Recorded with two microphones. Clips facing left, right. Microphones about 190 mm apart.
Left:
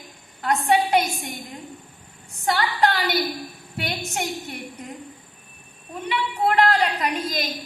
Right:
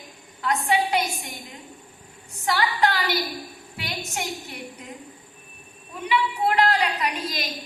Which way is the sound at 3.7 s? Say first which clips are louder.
Left 4 dB; 50° left (ahead or behind).